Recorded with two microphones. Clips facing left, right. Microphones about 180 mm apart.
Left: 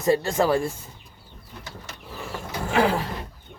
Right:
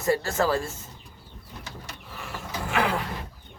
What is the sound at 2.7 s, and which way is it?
Speech, 30° left (ahead or behind).